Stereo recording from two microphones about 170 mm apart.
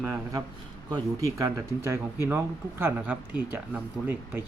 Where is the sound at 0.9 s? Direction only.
20° right (ahead or behind).